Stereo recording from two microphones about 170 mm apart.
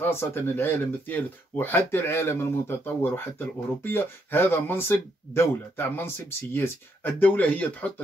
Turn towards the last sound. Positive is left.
turn(degrees=10)  # may be behind; listen again after turning